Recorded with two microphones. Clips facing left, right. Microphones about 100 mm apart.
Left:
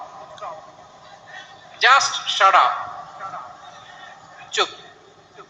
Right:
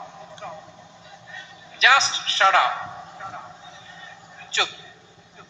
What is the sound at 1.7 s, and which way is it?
A man's voice, 15° left (ahead or behind).